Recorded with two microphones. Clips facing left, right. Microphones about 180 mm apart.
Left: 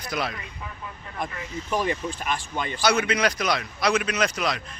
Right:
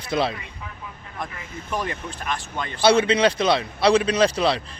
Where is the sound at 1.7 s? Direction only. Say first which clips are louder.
Left 3 dB; 5° left (ahead or behind).